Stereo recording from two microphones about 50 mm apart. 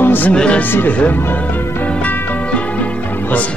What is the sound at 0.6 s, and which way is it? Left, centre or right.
Speech, left.